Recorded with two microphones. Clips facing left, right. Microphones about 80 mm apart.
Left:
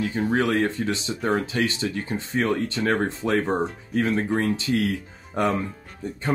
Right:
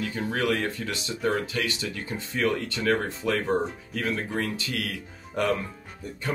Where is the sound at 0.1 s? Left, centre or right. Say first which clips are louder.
Left 3 dB; left.